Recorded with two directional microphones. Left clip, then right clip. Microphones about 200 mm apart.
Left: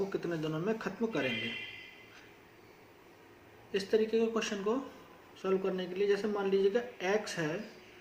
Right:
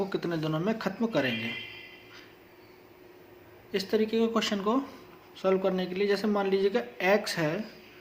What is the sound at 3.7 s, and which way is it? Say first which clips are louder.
Speech: right 2 dB; 40° right (ahead or behind).